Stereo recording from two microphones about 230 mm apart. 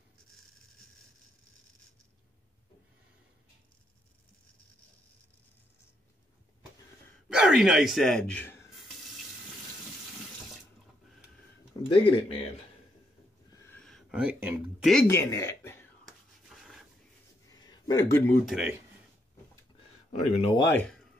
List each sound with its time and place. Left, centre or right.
7.2 s speech: centre
11.9 s speech: left
13.7 s speech: centre
16.1 s a sound: centre
17.5 s a sound: centre
18.4 s speech: centre
20.1 s speech: left
20.6 s speech: centre